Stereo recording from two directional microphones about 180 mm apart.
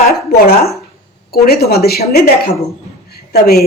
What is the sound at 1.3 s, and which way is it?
Speech, 60° left (ahead or behind).